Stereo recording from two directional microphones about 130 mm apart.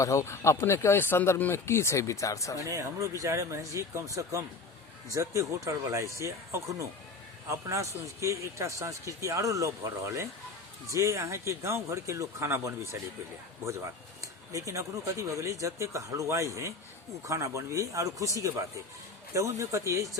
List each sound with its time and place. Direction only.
0.0 s speech: 25° left (ahead or behind)
2.6 s speech: 25° right (ahead or behind)